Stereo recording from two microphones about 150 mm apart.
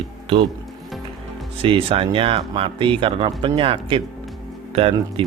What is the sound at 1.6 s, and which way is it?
A man's voice, 35° right (ahead or behind).